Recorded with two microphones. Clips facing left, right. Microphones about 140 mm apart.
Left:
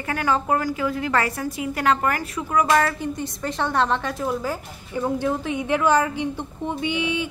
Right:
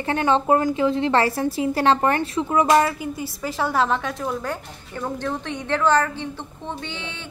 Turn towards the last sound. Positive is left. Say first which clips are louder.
# left 10 dB
turn(degrees=10)  # may be behind; listen again after turning